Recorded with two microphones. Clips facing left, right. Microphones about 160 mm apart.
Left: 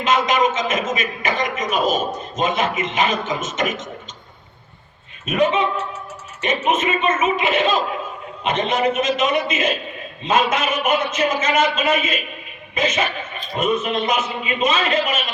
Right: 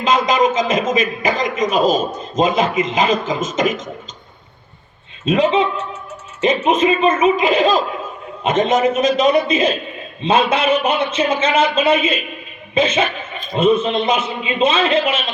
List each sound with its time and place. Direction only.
0.0 s a man's voice: 35° right (ahead or behind)
5.2 s a man's voice: 30° right (ahead or behind)
8.4 s a man's voice: 45° right (ahead or behind)
8.9 s a man's voice: 35° right (ahead or behind)